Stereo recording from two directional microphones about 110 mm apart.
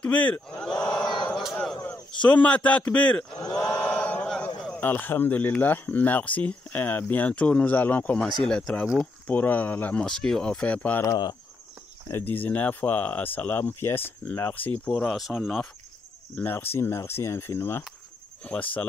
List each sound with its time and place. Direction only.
0.0 s speech: 15° left (ahead or behind)
0.6 s battle cry: 10° left (ahead or behind)
1.3 s a man's voice: 5° left (ahead or behind)
1.8 s a sound: 15° left (ahead or behind)
4.6 s speech: 10° left (ahead or behind)
11.1 s speech: 40° left (ahead or behind)
12.1 s speech: 20° left (ahead or behind); by 15.6 s centre (ahead or behind)
16.3 s speech: 20° left (ahead or behind)